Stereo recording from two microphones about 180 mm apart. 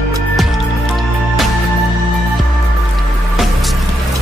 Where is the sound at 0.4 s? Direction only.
Centre (ahead or behind).